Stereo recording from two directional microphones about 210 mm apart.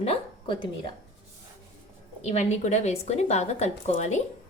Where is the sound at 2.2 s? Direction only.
30° left (ahead or behind).